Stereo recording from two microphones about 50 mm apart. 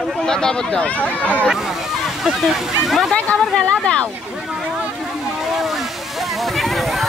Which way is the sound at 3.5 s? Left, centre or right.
Centre.